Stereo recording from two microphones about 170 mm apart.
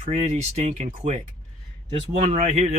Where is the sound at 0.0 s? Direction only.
40° right (ahead or behind).